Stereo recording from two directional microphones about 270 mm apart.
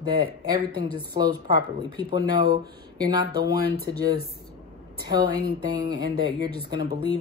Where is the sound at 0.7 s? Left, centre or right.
Centre.